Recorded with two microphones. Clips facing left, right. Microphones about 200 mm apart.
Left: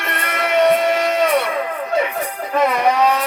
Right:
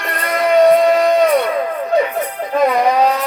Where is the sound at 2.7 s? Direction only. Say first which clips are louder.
Right 3 dB; 30° right (ahead or behind).